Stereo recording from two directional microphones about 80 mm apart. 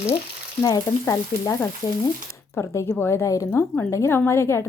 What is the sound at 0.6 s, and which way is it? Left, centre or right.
Speech, left.